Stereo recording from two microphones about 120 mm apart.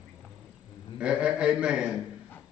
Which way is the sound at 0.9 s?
5° right (ahead or behind).